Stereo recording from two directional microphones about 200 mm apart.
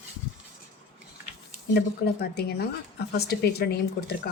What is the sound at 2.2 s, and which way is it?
A woman's voice, 55° left (ahead or behind).